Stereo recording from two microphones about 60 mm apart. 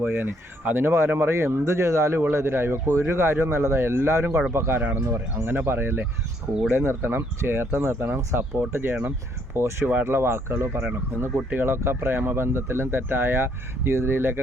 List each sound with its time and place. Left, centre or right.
0.0 s speech: right
4.8 s speech: right
5.0 s speech: right
5.5 s speech: right